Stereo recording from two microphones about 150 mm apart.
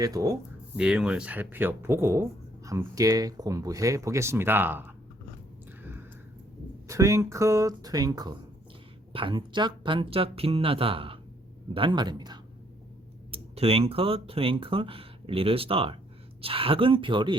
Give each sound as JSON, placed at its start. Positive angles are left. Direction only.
{"t": 0.0, "sound": "speech", "side_deg": -25}
{"t": 0.8, "sound": "speech", "side_deg": -5}
{"t": 6.8, "sound": "speech", "side_deg": -20}
{"t": 13.3, "sound": "speech", "side_deg": -40}